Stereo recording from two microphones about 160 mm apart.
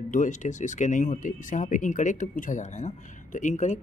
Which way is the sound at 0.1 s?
50° left (ahead or behind).